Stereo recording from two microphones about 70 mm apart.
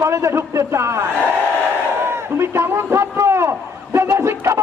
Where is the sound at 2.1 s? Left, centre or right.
Right.